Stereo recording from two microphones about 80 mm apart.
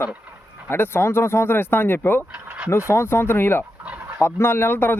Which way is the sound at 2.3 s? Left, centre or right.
Right.